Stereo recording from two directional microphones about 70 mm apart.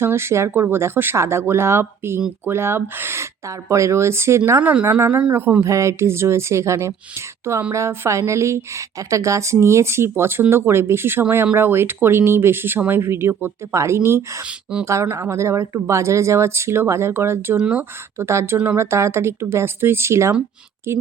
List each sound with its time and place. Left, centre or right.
0.0 s speech: right
3.7 s speech: right
4.6 s a woman's voice: right
5.6 s a woman's voice: right
17.6 s a woman's voice: right
18.2 s speech: right